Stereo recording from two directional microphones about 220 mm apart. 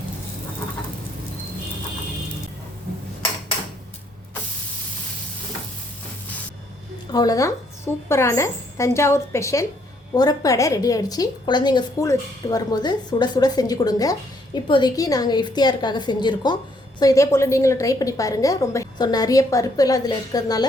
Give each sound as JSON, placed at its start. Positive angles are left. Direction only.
{"t": 7.1, "sound": "a woman's voice", "side_deg": 15}